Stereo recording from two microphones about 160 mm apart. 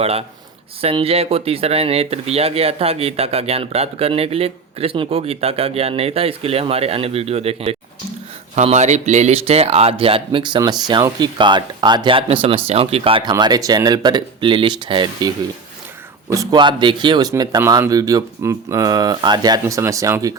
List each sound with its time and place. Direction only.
0.0 s speech: 40° right (ahead or behind)
13.3 s a man's voice: 25° right (ahead or behind)
16.3 s a man's voice: 25° right (ahead or behind)